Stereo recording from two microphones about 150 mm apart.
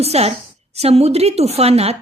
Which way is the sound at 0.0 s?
45° right (ahead or behind).